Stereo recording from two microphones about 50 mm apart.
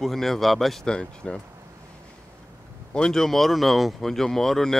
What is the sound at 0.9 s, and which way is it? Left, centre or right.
Speech, centre.